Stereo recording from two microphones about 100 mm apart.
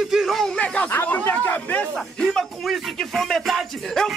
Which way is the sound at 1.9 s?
5° left (ahead or behind).